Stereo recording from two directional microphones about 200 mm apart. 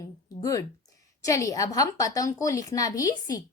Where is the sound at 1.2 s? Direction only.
15° left (ahead or behind).